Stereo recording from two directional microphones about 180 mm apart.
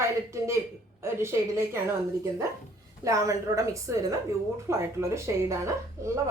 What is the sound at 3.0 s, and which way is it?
A woman's voice, 20° right (ahead or behind).